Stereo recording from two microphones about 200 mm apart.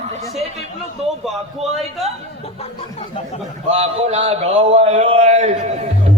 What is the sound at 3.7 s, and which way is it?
Speech, 30° right (ahead or behind).